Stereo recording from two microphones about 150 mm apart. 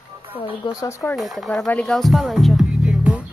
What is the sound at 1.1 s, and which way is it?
Music, centre (ahead or behind).